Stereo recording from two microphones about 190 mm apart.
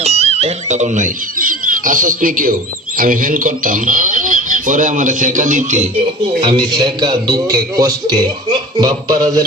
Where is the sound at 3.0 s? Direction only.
45° right (ahead or behind).